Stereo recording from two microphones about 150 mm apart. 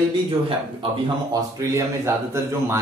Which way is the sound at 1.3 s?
20° right (ahead or behind).